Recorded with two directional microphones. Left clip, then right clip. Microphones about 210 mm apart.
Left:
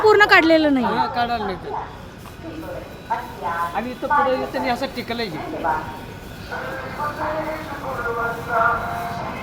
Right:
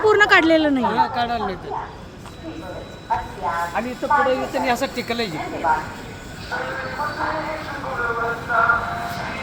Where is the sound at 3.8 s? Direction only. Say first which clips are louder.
Right 1 dB; 40° right (ahead or behind).